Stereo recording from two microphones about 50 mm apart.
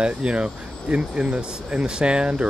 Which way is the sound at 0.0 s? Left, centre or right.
Right.